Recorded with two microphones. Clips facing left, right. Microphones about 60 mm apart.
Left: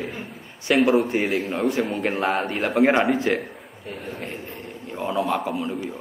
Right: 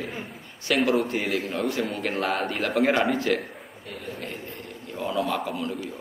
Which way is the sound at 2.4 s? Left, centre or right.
Centre.